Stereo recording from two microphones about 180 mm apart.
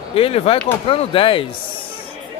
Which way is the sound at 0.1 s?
30° left (ahead or behind).